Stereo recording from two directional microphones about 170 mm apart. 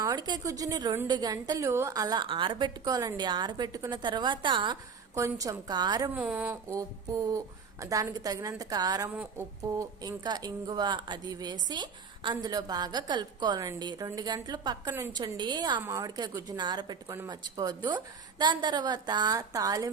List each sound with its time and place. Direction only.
0.0 s a woman's voice: 25° right (ahead or behind)
6.1 s a woman's voice: 10° right (ahead or behind)